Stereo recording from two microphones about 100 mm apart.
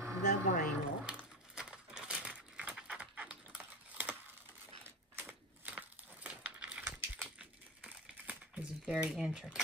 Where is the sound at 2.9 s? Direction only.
10° right (ahead or behind).